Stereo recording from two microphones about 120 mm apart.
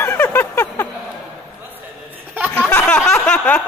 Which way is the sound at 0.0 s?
15° left (ahead or behind).